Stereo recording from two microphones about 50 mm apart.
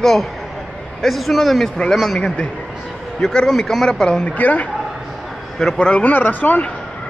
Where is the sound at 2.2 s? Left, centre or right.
Centre.